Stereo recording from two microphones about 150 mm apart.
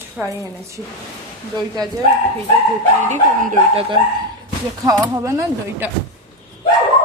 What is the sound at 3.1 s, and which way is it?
Speech, 60° right (ahead or behind).